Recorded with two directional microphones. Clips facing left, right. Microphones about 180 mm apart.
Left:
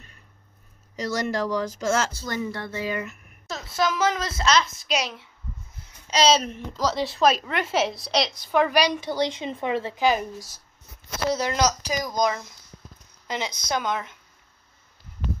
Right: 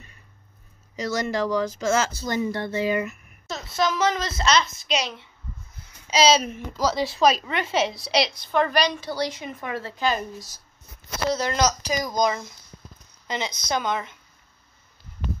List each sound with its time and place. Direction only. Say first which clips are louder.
0.9 s speech: right 1 dB; 5° right (ahead or behind)
2.2 s speech: right 4 dB; 20° right (ahead or behind)
3.4 s speech: right 1 dB; 5° left (ahead or behind)
11.2 s speech: even; 10° left (ahead or behind)